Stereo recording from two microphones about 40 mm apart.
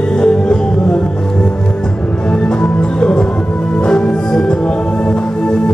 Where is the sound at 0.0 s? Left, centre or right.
Left.